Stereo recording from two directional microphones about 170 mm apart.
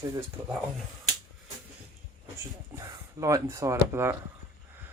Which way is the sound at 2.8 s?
20° right (ahead or behind).